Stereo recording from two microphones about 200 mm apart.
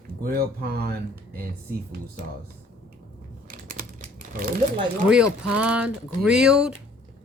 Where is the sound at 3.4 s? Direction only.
45° right (ahead or behind).